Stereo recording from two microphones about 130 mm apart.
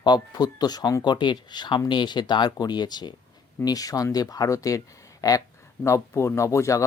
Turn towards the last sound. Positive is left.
turn(degrees=25)  # may be behind; listen again after turning